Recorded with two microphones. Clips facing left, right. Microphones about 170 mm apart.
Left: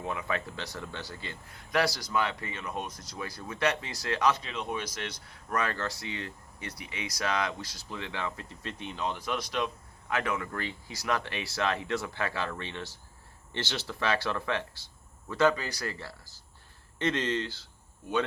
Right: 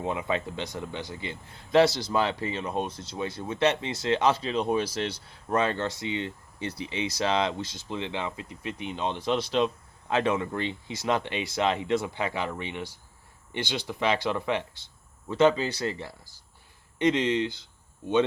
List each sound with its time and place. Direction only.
0.0 s speech: 20° right (ahead or behind)